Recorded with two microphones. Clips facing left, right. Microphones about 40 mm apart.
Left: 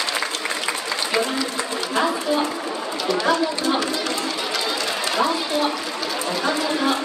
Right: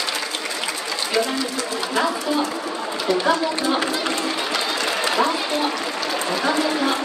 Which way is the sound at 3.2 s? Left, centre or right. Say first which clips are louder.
Even; centre.